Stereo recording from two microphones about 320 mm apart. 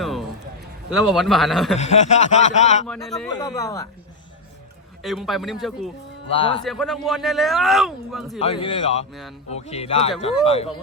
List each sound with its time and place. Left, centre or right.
0.0 s a sound: centre
0.9 s a man's voice: centre
1.8 s speech: left
2.8 s speech: centre
5.0 s a man's voice: centre
6.3 s speech: centre
6.7 s a man's voice: centre
8.4 s speech: centre